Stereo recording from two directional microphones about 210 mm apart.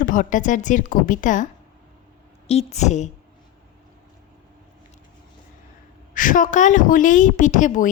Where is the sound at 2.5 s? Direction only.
30° left (ahead or behind).